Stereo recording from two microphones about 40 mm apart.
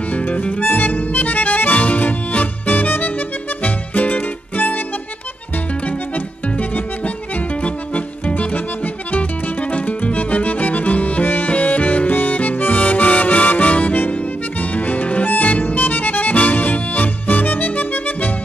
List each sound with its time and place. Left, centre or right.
0.1 s music: left
5.9 s music: left
11.2 s music: left
11.5 s harmonica: left
14.6 s music: left